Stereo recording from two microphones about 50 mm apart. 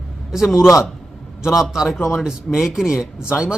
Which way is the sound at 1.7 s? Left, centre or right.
Centre.